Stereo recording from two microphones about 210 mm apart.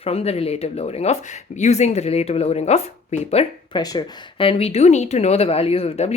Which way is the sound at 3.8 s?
20° left (ahead or behind).